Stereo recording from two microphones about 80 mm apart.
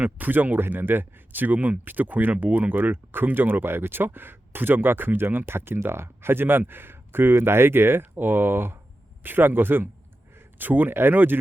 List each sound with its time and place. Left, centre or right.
0.0 s speech: right